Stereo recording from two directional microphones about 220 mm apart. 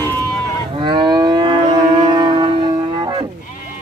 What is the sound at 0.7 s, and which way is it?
Livestock, 20° right (ahead or behind).